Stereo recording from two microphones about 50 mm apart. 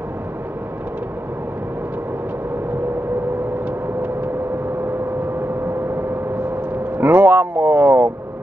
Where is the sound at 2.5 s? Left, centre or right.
Right.